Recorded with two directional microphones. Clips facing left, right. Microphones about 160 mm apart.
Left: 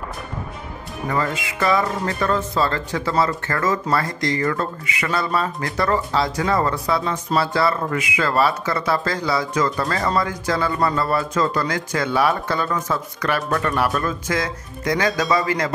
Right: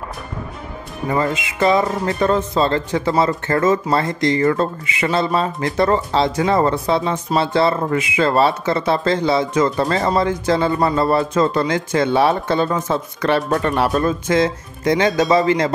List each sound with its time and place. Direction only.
1.1 s speech: 20° right (ahead or behind)